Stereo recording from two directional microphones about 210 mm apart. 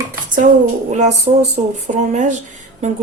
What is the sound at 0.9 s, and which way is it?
Speech, 35° right (ahead or behind).